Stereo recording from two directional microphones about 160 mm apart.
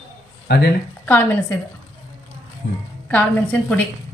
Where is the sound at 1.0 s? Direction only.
10° left (ahead or behind).